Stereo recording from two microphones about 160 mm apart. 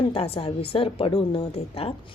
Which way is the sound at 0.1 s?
35° left (ahead or behind).